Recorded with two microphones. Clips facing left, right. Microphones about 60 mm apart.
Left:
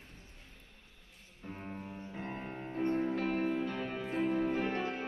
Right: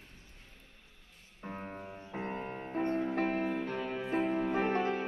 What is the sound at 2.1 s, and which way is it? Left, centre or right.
Music, right.